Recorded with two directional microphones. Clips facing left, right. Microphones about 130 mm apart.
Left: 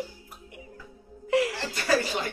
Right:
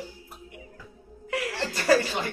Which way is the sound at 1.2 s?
25° left (ahead or behind).